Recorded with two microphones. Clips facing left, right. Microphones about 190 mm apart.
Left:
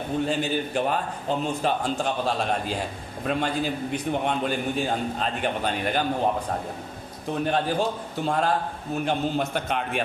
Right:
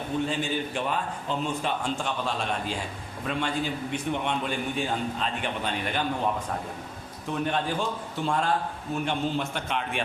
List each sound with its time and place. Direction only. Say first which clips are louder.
0.3 s a man's voice: left 3 dB; 45° left (ahead or behind)
7.3 s a man's voice: left 3 dB; 35° left (ahead or behind)